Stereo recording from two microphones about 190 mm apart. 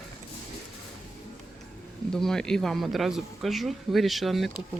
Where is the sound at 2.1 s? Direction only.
Centre (ahead or behind).